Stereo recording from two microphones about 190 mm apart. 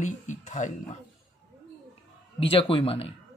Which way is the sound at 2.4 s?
30° left (ahead or behind).